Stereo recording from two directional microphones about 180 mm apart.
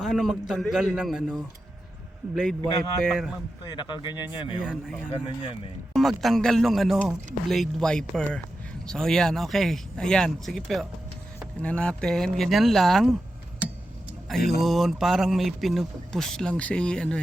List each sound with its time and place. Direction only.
0.0 s a man's voice: centre (ahead or behind)
3.7 s speech: 25° left (ahead or behind)
4.6 s a man's voice: 5° right (ahead or behind)
14.3 s a man's voice: centre (ahead or behind)